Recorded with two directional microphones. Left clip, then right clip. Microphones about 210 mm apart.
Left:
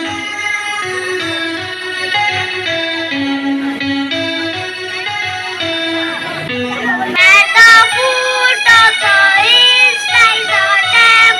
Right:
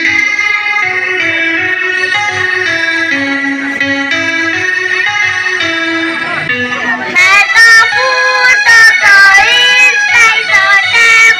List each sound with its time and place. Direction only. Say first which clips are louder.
7.2 s music: right 1 dB; 40° left (ahead or behind)
8.6 s child singing: right 3 dB; 40° left (ahead or behind)